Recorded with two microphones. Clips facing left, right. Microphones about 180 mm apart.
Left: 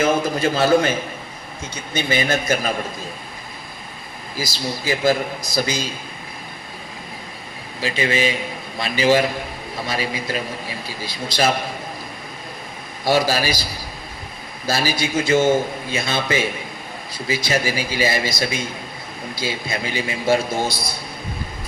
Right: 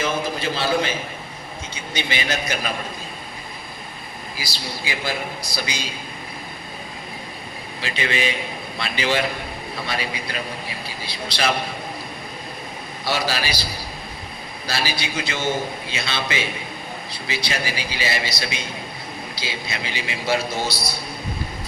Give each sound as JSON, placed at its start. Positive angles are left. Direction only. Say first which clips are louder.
{"t": 0.0, "sound": "a man's voice", "louder": "left 6 dB", "side_deg": 45}
{"t": 1.9, "sound": "a man's voice", "louder": "left 5 dB", "side_deg": 45}
{"t": 4.4, "sound": "a man's voice", "louder": "left 7 dB", "side_deg": 45}
{"t": 7.8, "sound": "a man's voice", "louder": "left 5 dB", "side_deg": 35}
{"t": 11.0, "sound": "a man's voice", "louder": "left 4 dB", "side_deg": 45}
{"t": 13.1, "sound": "a man's voice", "louder": "left 6 dB", "side_deg": 45}
{"t": 14.7, "sound": "a man's voice", "louder": "left 6 dB", "side_deg": 45}